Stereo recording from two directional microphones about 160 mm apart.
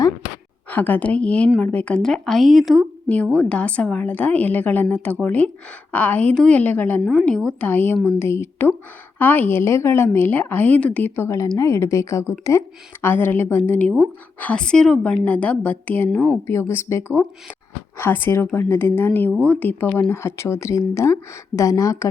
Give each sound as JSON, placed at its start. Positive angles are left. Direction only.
{"t": 0.7, "sound": "speech", "side_deg": 10}
{"t": 7.0, "sound": "speech", "side_deg": 0}